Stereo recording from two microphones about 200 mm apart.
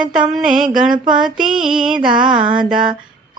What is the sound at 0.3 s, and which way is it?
Female singing, centre (ahead or behind).